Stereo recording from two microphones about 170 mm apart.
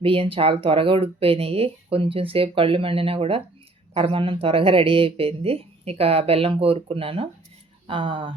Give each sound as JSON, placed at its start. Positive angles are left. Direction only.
{"t": 0.0, "sound": "speech", "side_deg": -30}